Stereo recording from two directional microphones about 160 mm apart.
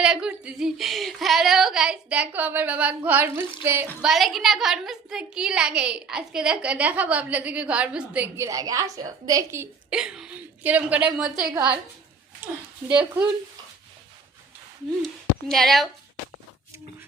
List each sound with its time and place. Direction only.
0.0 s speech: 5° right (ahead or behind)
4.0 s a woman's voice: centre (ahead or behind)
8.4 s a woman's voice: 20° right (ahead or behind)
9.9 s a woman's voice: 5° right (ahead or behind)
12.9 s a woman's voice: 5° right (ahead or behind)
15.4 s a woman's voice: centre (ahead or behind)